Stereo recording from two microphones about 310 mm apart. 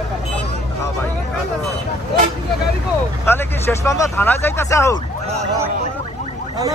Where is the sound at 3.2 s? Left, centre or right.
Centre.